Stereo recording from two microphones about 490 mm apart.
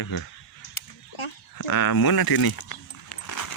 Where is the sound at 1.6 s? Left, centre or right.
Left.